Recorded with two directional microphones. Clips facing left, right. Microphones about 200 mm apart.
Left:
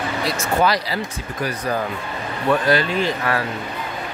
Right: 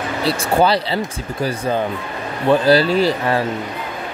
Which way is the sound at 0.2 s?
30° right (ahead or behind).